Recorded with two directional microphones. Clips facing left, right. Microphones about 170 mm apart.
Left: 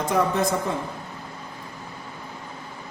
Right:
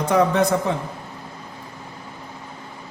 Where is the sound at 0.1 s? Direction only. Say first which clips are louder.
Right 5 dB; 75° right (ahead or behind).